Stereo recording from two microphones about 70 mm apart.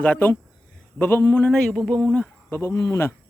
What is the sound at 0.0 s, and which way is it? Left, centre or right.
Speech, left.